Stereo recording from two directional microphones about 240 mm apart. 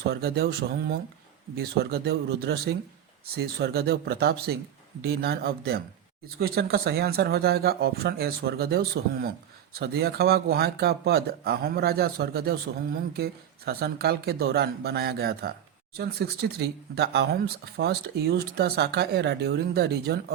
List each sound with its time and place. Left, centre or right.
0.1 s speech: right